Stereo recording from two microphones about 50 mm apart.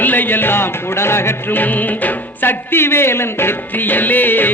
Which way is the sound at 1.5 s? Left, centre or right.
Left.